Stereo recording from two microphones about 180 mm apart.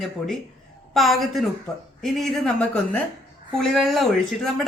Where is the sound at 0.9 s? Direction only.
Centre (ahead or behind).